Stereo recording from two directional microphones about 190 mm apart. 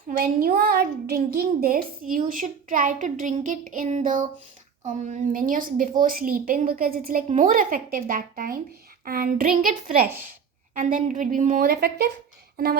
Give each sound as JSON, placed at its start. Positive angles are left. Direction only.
{"t": 0.2, "sound": "a woman's voice", "side_deg": -50}
{"t": 11.6, "sound": "speech", "side_deg": -55}